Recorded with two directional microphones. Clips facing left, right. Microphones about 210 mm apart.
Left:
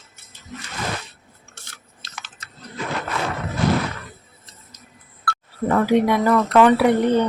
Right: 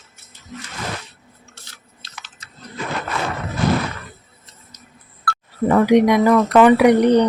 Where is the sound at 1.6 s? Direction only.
50° left (ahead or behind).